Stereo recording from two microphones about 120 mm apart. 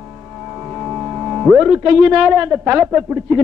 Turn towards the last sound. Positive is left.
turn(degrees=-15)  # may be behind; listen again after turning